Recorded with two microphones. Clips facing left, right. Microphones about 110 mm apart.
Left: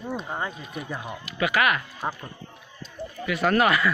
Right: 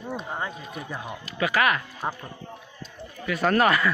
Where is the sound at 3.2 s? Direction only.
40° right (ahead or behind).